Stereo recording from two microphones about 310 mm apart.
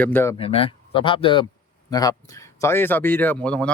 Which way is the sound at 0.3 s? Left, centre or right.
Centre.